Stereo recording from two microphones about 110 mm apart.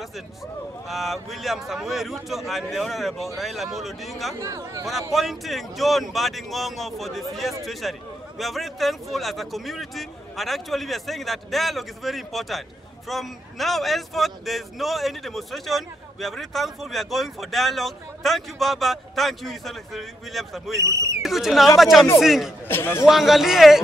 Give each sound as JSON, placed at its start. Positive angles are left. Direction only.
{"t": 0.8, "sound": "speech", "side_deg": 0}
{"t": 4.4, "sound": "speech", "side_deg": -30}
{"t": 5.1, "sound": "speech", "side_deg": 0}
{"t": 20.8, "sound": "speech", "side_deg": -30}
{"t": 21.2, "sound": "speech", "side_deg": 0}
{"t": 22.7, "sound": "a man's voice", "side_deg": 20}
{"t": 23.0, "sound": "speech", "side_deg": 0}